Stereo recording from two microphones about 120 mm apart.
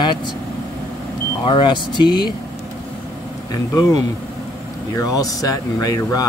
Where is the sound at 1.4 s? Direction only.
40° left (ahead or behind).